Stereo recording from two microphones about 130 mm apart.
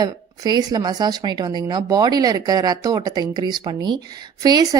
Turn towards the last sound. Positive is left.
turn(degrees=-30)  # may be behind; listen again after turning